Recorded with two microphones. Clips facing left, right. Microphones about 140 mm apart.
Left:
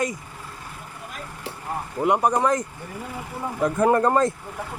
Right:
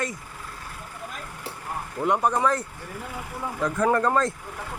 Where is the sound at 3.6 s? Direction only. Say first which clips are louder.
Left 4 dB; 20° left (ahead or behind).